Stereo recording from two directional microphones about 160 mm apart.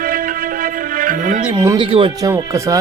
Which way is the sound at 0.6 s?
60° right (ahead or behind).